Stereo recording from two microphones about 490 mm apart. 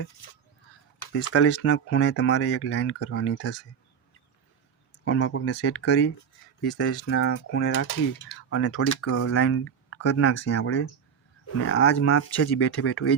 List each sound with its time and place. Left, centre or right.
1.2 s speech: left
5.0 s speech: left